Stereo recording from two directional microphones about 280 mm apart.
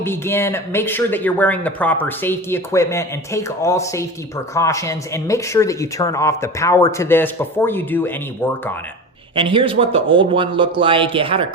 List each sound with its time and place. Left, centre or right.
0.0 s speech: centre
9.3 s a man's voice: centre